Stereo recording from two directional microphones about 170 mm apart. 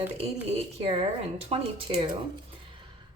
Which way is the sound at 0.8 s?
35° right (ahead or behind).